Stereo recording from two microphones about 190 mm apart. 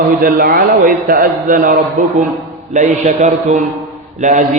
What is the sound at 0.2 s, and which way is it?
A man's voice, 50° right (ahead or behind).